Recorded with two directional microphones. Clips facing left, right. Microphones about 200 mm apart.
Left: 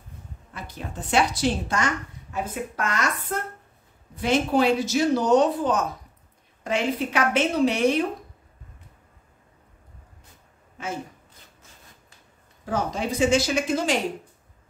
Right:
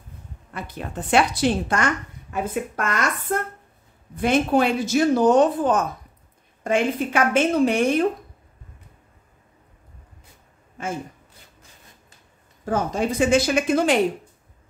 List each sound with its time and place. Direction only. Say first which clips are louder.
0.5 s a woman's voice: right 4 dB; 60° right (ahead or behind)
12.6 s a woman's voice: right 4 dB; 50° right (ahead or behind)